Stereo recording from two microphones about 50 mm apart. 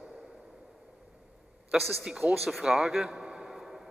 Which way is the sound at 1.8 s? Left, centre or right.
Centre.